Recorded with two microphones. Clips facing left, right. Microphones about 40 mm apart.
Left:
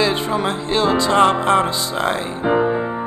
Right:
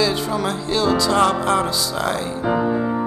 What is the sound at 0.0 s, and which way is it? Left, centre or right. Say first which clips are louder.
Music: left 2 dB; left.